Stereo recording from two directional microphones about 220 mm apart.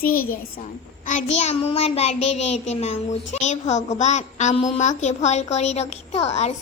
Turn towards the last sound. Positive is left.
turn(degrees=30)  # may be behind; listen again after turning